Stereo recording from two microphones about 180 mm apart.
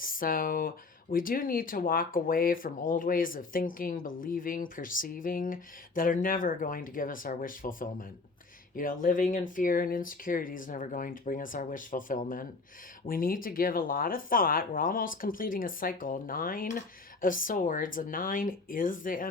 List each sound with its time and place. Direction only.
0.0 s speech: 50° left (ahead or behind)